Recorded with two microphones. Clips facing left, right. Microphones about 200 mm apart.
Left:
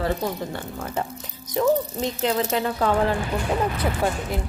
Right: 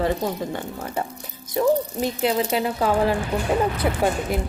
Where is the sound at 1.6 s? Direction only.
10° right (ahead or behind).